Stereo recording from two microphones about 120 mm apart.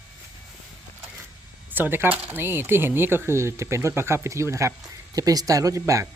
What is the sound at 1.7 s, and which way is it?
Speech, 15° right (ahead or behind).